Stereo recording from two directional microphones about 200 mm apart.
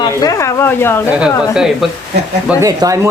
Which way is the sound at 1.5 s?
Centre (ahead or behind).